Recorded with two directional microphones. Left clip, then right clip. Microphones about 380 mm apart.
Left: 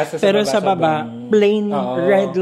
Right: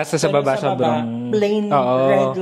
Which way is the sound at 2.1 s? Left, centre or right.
Left.